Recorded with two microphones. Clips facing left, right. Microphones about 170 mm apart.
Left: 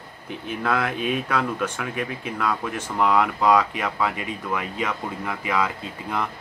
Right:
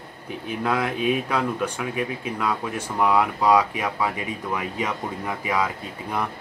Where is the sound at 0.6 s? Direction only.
15° right (ahead or behind).